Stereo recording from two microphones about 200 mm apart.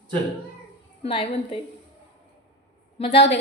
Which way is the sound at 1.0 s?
30° left (ahead or behind).